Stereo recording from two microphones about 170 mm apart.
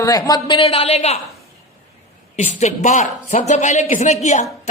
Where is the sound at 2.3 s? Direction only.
40° left (ahead or behind).